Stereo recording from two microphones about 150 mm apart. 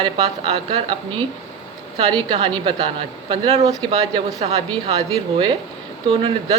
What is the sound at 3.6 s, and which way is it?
A woman's voice, 25° right (ahead or behind).